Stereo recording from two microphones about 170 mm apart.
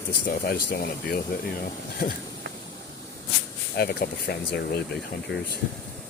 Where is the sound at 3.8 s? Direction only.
65° left (ahead or behind).